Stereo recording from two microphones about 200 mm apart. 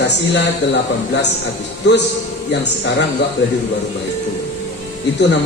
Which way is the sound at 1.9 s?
60° left (ahead or behind).